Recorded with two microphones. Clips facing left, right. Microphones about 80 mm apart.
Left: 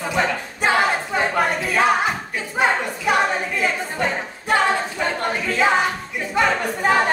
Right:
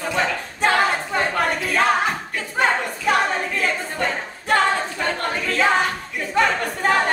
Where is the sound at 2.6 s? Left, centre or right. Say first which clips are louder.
Left 1 dB; centre.